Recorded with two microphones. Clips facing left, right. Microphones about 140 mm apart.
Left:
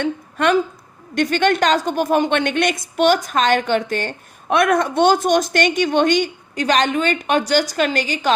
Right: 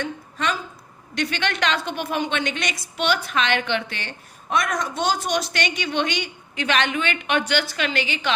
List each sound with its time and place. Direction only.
0.0 s a woman's voice: 60° left (ahead or behind)
1.1 s a woman's voice: 50° left (ahead or behind)